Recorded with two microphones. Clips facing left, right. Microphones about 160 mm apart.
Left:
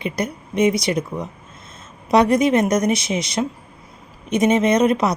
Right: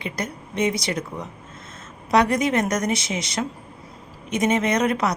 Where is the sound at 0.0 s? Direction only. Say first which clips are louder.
Left 5 dB; 20° left (ahead or behind).